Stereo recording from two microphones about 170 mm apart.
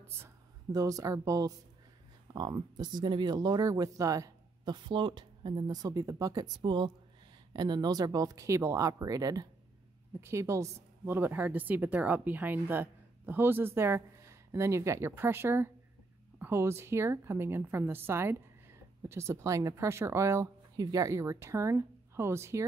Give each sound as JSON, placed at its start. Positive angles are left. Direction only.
{"t": 0.2, "sound": "a woman's voice", "side_deg": -20}